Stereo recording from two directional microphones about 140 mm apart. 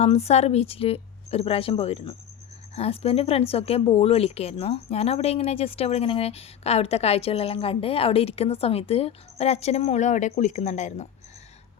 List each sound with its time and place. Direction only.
0.0 s a woman's voice: 50° left (ahead or behind)